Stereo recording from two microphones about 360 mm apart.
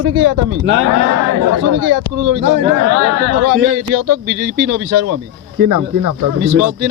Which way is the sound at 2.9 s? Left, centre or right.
Right.